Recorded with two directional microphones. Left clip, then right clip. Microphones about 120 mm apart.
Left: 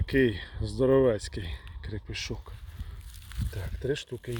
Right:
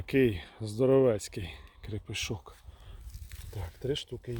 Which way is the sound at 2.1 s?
30° right (ahead or behind).